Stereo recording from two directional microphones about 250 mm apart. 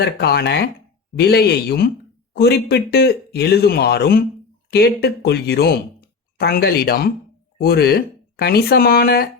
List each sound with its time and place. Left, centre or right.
0.0 s speech: left